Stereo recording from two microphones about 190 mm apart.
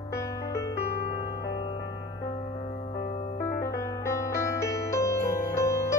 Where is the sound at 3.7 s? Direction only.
15° left (ahead or behind).